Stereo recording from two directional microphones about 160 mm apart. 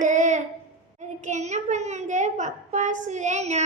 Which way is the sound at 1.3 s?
45° right (ahead or behind).